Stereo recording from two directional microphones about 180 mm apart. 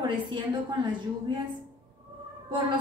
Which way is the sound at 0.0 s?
25° right (ahead or behind).